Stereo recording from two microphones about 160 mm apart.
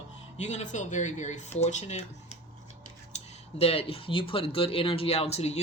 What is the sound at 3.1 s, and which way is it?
Speech, 40° left (ahead or behind).